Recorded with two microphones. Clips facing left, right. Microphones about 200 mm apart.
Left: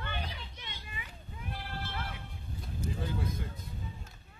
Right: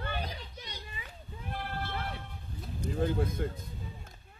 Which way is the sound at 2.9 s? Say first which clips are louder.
Right 8 dB; 50° right (ahead or behind).